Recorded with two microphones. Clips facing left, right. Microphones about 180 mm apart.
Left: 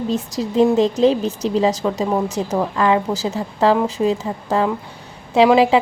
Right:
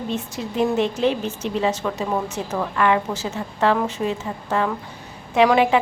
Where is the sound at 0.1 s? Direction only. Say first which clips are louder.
Left 6 dB; 35° left (ahead or behind).